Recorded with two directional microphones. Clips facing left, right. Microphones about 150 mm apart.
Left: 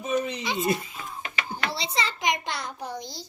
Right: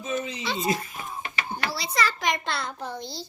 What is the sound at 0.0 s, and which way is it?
Speech, 65° left (ahead or behind).